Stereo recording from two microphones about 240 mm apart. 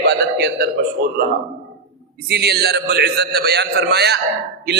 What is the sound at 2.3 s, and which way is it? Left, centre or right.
A man's voice, right.